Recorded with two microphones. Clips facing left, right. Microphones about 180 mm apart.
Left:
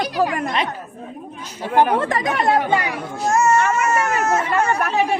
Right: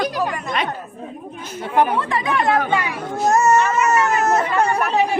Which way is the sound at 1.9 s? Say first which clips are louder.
Left 1 dB; 45° left (ahead or behind).